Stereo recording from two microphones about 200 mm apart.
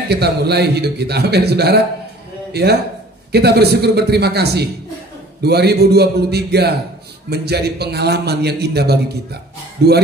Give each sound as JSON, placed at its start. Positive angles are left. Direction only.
{"t": 0.1, "sound": "a man's voice", "side_deg": -55}